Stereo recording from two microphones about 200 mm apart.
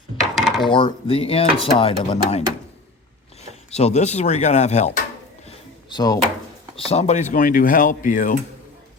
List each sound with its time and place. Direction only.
0.3 s coin: centre (ahead or behind)
0.7 s speech: 25° left (ahead or behind)
3.7 s speech: 30° left (ahead or behind)
5.5 s a sound: 20° left (ahead or behind)
6.7 s speech: 30° left (ahead or behind)